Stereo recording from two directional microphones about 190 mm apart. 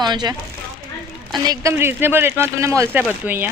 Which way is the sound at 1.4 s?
20° right (ahead or behind).